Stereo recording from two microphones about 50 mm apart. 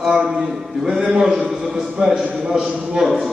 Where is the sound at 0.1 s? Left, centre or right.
Centre.